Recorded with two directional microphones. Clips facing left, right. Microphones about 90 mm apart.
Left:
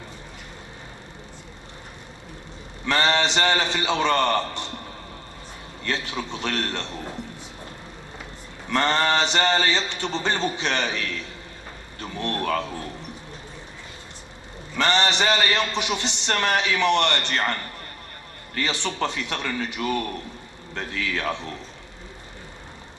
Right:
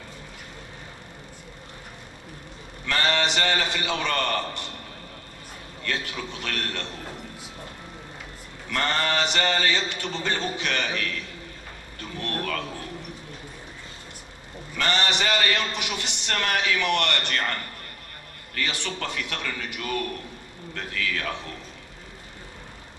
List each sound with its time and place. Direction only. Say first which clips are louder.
2.9 s a man's voice: left 3 dB; 25° left (ahead or behind)
5.9 s a man's voice: left 3 dB; 25° left (ahead or behind)
8.6 s a man's voice: left 4 dB; 25° left (ahead or behind)
12.0 s a sound: left 4 dB; 25° left (ahead or behind)
14.8 s a man's voice: left 4 dB; 25° left (ahead or behind)